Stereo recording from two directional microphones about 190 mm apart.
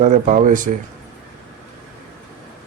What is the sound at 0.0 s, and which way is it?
Speech, 40° right (ahead or behind).